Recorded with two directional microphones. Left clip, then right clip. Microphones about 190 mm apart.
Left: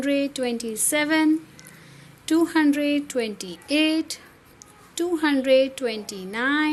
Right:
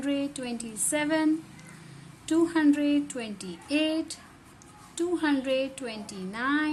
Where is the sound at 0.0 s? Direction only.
30° left (ahead or behind).